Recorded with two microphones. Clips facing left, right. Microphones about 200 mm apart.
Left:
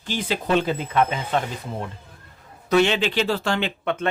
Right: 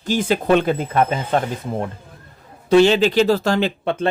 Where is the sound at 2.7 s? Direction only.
35° right (ahead or behind).